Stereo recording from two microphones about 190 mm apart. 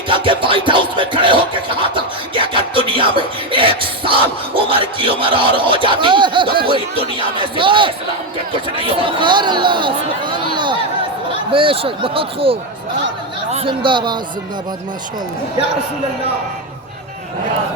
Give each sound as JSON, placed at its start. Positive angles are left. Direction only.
{"t": 0.1, "sound": "speech", "side_deg": -25}
{"t": 2.0, "sound": "music", "side_deg": -25}
{"t": 4.8, "sound": "speech", "side_deg": -30}